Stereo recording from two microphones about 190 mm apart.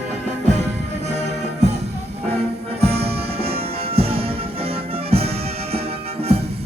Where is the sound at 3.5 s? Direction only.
30° right (ahead or behind).